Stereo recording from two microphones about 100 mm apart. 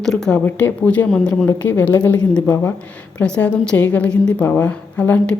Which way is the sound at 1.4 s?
20° left (ahead or behind).